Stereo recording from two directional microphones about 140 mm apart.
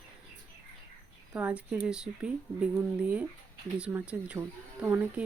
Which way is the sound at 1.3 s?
10° right (ahead or behind).